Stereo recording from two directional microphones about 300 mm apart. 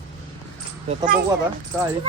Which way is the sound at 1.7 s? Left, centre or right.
Centre.